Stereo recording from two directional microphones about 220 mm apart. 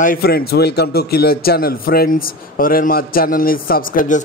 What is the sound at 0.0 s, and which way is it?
A man's voice, 40° left (ahead or behind).